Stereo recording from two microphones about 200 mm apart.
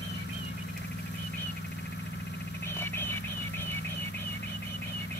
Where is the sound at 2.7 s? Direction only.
10° left (ahead or behind).